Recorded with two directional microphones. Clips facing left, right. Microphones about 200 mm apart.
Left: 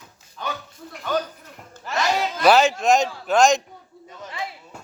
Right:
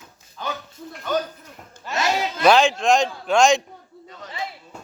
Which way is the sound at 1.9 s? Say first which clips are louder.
Even; centre (ahead or behind).